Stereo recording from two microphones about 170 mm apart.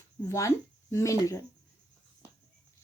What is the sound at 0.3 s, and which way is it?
Speech, 15° left (ahead or behind).